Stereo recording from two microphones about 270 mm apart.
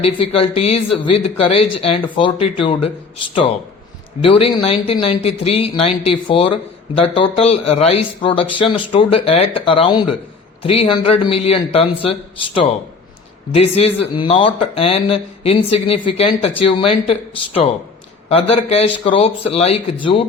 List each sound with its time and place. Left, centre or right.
0.0 s speech: left